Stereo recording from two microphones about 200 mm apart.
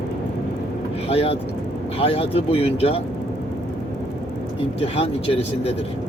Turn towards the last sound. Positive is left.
turn(degrees=30)  # may be behind; listen again after turning